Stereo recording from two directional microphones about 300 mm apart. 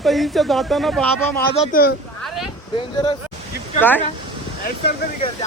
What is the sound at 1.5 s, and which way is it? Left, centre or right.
Speech, left.